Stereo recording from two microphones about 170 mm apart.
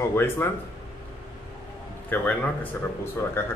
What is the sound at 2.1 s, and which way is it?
Speech, 10° left (ahead or behind).